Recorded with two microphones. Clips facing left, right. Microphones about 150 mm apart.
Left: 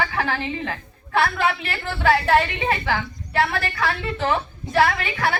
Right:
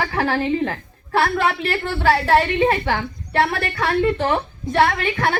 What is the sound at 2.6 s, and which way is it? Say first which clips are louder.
A woman's voice: right 5 dB; 55° right (ahead or behind).